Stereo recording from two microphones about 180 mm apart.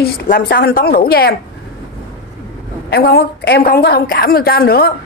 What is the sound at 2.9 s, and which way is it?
A woman's voice, 60° left (ahead or behind).